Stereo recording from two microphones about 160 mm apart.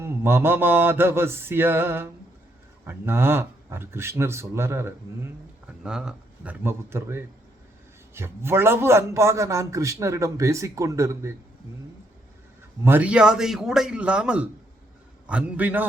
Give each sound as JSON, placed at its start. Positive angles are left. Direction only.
{"t": 0.0, "sound": "a man's voice", "side_deg": -15}
{"t": 5.8, "sound": "a man's voice", "side_deg": -5}
{"t": 12.8, "sound": "a man's voice", "side_deg": -10}